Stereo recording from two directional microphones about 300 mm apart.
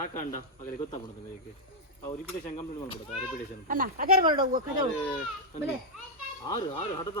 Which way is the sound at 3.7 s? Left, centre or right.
Right.